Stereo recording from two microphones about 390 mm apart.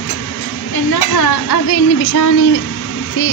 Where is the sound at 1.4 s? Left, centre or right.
Left.